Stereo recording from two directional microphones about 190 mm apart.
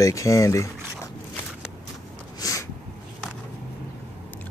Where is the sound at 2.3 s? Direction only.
15° left (ahead or behind).